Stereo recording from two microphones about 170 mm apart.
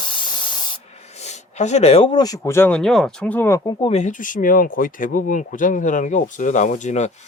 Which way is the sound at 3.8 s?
40° left (ahead or behind).